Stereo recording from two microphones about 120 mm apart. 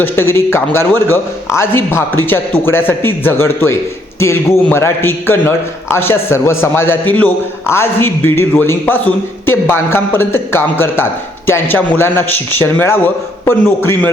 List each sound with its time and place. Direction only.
0.0 s a man's voice: 20° left (ahead or behind)